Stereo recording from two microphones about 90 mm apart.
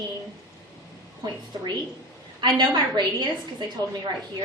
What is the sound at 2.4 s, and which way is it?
A woman's voice, 55° right (ahead or behind).